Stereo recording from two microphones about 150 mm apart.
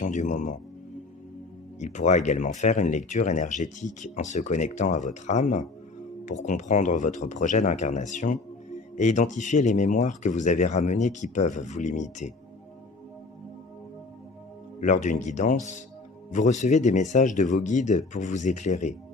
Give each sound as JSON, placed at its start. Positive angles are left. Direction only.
{"t": 0.0, "sound": "speech", "side_deg": 55}
{"t": 1.8, "sound": "speech", "side_deg": 55}
{"t": 14.8, "sound": "speech", "side_deg": 55}